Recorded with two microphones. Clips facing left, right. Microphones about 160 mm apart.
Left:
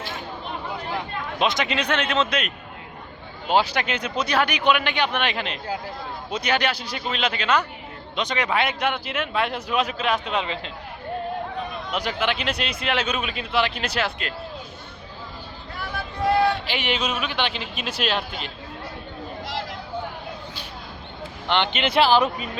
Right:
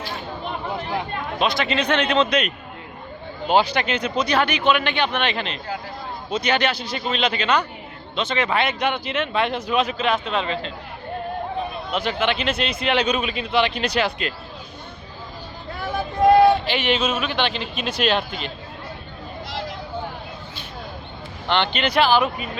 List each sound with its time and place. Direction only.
1.4 s speech: 20° left (ahead or behind)
3.5 s speech: 5° left (ahead or behind)
11.9 s a man's voice: 10° left (ahead or behind)
16.6 s speech: 10° left (ahead or behind)
21.5 s speech: 15° left (ahead or behind); by 22.4 s 35° left (ahead or behind)